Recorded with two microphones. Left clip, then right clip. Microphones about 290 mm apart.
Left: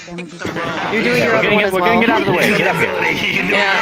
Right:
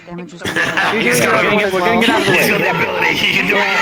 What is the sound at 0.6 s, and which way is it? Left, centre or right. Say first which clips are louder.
Speech: right 4 dB; right.